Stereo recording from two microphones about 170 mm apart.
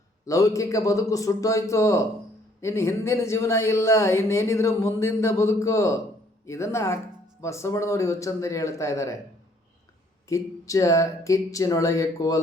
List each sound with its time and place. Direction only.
0.3 s speech: 20° left (ahead or behind)
10.2 s speech: 20° left (ahead or behind)